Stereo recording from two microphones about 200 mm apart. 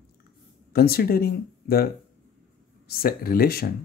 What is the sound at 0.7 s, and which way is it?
Speech, 50° left (ahead or behind).